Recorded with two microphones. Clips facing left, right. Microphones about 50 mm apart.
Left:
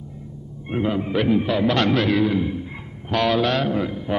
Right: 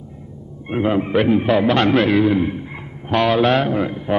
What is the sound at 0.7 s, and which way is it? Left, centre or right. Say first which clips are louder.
A man's voice: right 4 dB; right.